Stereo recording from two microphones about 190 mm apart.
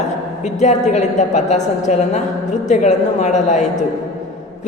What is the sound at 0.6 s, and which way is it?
A man's voice, 35° left (ahead or behind).